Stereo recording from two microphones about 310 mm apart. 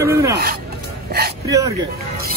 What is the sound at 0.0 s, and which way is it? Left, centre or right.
Music, centre.